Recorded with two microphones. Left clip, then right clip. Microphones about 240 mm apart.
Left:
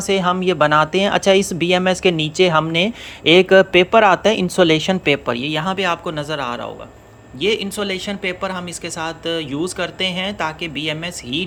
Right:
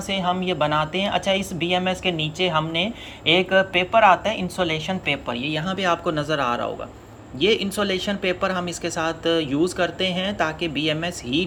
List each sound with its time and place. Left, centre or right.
0.1 s a woman's voice: centre